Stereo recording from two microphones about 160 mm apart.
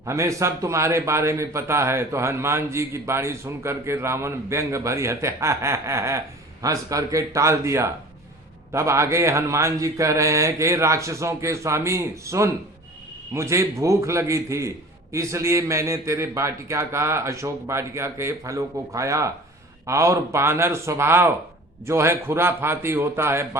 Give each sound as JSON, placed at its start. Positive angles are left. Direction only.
{"t": 0.0, "sound": "a man's voice", "side_deg": -20}